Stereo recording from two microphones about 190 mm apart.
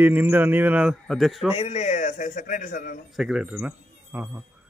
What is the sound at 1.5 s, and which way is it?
A man's voice, 35° left (ahead or behind).